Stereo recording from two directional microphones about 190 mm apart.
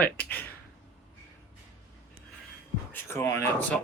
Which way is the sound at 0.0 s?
10° left (ahead or behind).